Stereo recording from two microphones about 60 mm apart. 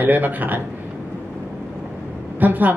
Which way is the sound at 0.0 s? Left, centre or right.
Right.